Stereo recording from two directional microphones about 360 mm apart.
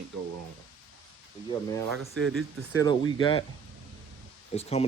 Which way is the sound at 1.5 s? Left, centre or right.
Centre.